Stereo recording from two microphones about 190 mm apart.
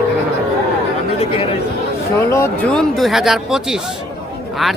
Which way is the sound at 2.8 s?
Centre (ahead or behind).